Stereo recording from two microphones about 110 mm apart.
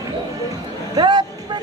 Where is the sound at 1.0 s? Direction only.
40° right (ahead or behind).